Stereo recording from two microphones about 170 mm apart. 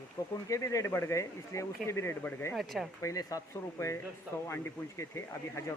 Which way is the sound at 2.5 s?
Centre (ahead or behind).